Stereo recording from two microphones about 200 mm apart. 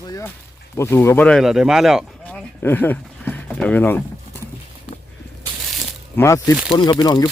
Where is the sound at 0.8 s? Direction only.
15° left (ahead or behind).